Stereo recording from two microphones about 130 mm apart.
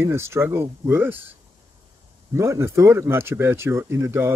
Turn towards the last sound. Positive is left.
turn(degrees=-20)  # may be behind; listen again after turning